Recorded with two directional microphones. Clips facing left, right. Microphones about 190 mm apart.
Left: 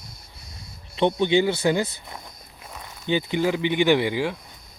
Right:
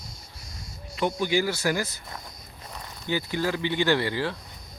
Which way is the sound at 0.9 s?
25° left (ahead or behind).